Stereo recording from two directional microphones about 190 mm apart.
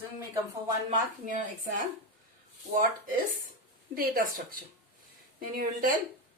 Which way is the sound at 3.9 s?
50° right (ahead or behind).